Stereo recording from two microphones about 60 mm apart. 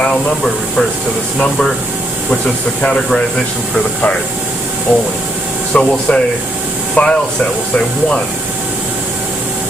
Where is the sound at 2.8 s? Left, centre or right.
Centre.